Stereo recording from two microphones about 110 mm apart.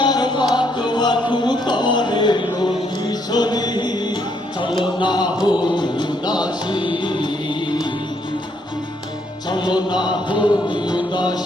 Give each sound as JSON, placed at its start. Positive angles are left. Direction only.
{"t": 0.0, "sound": "music", "side_deg": 40}
{"t": 9.5, "sound": "music", "side_deg": 40}